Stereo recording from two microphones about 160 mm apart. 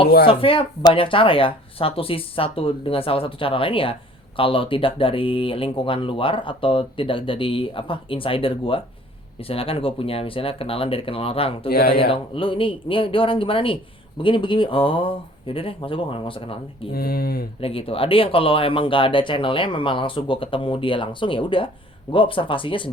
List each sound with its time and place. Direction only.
0.3 s speech: 35° left (ahead or behind)
16.9 s speech: 70° left (ahead or behind)
17.6 s speech: 35° left (ahead or behind)